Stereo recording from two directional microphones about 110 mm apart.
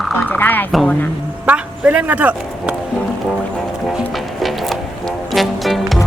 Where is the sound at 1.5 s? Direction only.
15° right (ahead or behind).